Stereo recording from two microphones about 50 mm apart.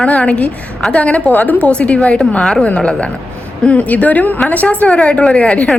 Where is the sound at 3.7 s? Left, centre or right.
Left.